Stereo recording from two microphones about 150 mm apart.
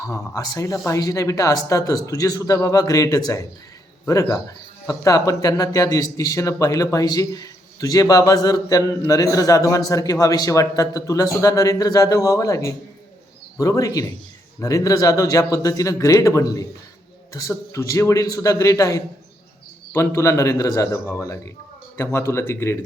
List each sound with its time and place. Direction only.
0.0 s speech: 20° left (ahead or behind)